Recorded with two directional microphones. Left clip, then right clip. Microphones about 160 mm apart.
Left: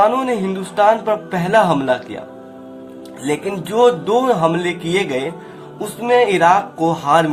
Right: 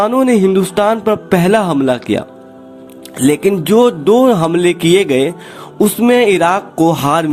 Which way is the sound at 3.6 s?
50° right (ahead or behind).